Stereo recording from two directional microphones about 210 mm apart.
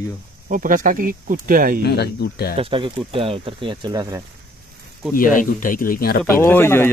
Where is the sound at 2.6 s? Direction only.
25° right (ahead or behind).